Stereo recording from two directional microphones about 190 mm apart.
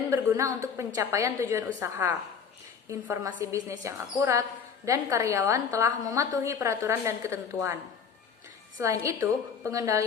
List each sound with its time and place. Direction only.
0.1 s a woman's voice: 15° right (ahead or behind)
8.8 s a woman's voice: 15° right (ahead or behind)